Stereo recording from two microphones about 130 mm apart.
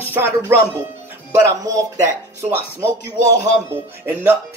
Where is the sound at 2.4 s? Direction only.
20° right (ahead or behind).